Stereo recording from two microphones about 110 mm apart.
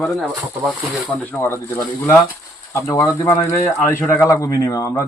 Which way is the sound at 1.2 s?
15° left (ahead or behind).